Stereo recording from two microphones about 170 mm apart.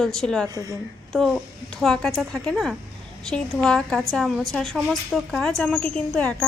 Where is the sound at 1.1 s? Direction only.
Centre (ahead or behind).